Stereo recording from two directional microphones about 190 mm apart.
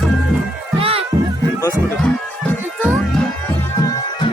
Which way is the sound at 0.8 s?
30° right (ahead or behind).